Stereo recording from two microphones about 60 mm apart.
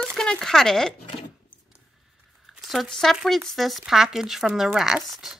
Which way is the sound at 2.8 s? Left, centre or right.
Centre.